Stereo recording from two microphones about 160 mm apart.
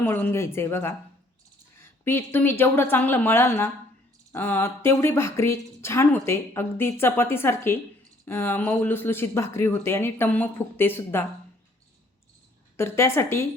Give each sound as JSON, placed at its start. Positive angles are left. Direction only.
{"t": 0.0, "sound": "a woman's voice", "side_deg": 10}
{"t": 12.7, "sound": "a woman's voice", "side_deg": 15}